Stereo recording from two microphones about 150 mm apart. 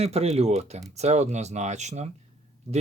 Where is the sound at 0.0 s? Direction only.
45° right (ahead or behind).